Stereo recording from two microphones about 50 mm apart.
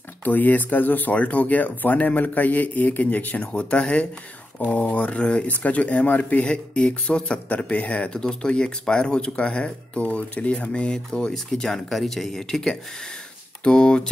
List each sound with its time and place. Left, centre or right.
0.2 s speech: left
3.5 s speech: left
10.7 s speech: centre